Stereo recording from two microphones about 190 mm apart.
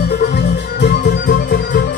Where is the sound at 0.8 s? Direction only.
60° left (ahead or behind).